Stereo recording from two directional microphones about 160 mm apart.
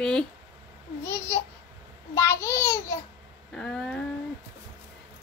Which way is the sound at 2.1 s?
15° left (ahead or behind).